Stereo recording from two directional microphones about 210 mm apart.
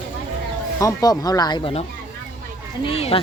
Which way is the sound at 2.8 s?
25° left (ahead or behind).